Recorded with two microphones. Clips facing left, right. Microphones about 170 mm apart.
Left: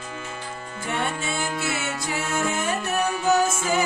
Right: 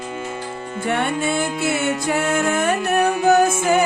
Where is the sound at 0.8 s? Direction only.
60° right (ahead or behind).